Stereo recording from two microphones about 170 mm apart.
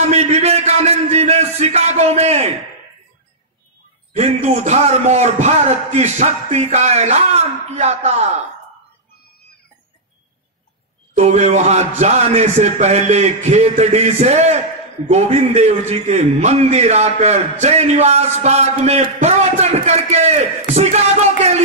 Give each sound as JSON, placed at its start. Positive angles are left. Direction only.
{"t": 0.1, "sound": "a man's voice", "side_deg": -40}
{"t": 4.2, "sound": "a man's voice", "side_deg": -40}
{"t": 11.1, "sound": "a man's voice", "side_deg": -40}